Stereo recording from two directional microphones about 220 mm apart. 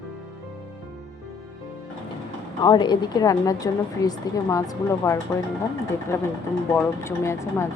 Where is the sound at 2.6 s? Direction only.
20° left (ahead or behind).